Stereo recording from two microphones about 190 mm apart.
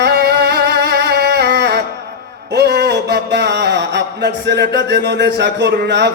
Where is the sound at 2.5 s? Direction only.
60° right (ahead or behind).